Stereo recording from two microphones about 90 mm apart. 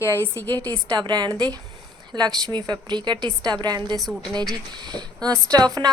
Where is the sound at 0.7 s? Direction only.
55° right (ahead or behind).